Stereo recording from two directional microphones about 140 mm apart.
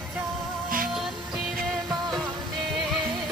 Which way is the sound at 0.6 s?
90° right.